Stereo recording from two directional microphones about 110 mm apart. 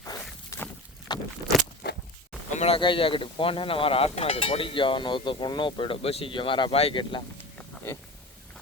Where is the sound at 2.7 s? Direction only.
50° left (ahead or behind).